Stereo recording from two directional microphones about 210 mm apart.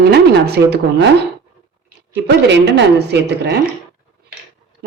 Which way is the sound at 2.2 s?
55° right (ahead or behind).